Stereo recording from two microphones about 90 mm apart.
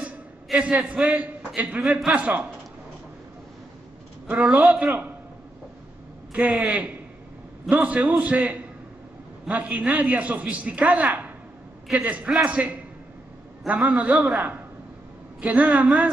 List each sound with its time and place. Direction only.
0.0 s a man's voice: 15° right (ahead or behind)
4.3 s a man's voice: 15° right (ahead or behind)
6.3 s a man's voice: 15° right (ahead or behind)